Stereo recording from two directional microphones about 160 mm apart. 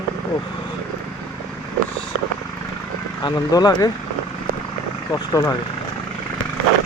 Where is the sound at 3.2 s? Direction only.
25° left (ahead or behind).